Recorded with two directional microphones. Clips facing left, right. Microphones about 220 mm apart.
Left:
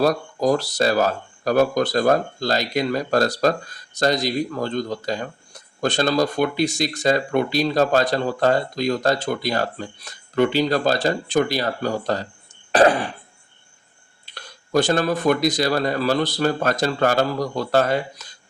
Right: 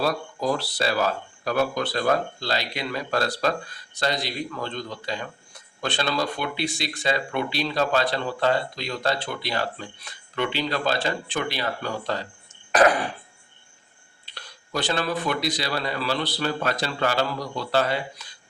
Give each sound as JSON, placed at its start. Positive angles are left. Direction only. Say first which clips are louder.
{"t": 0.0, "sound": "speech", "louder": "left 6 dB", "side_deg": 45}
{"t": 12.7, "sound": "cough", "louder": "left 3 dB", "side_deg": 30}
{"t": 14.3, "sound": "speech", "louder": "left 6 dB", "side_deg": 45}